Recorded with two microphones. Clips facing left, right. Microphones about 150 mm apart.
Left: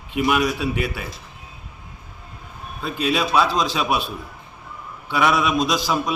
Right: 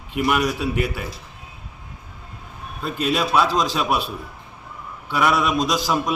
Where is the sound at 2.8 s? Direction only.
Centre (ahead or behind).